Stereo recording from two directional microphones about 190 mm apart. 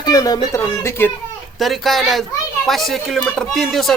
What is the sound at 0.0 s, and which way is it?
Speech, 20° left (ahead or behind).